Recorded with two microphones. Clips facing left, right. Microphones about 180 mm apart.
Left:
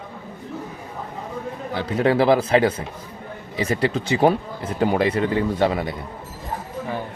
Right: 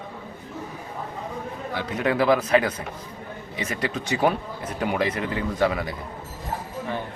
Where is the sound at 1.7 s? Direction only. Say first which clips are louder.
Left 5 dB; 30° left (ahead or behind).